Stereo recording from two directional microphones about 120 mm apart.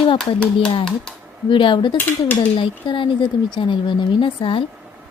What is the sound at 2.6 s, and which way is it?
A woman's voice, 45° left (ahead or behind).